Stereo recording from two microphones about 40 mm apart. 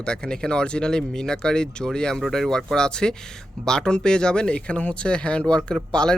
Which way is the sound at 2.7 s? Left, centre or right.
Centre.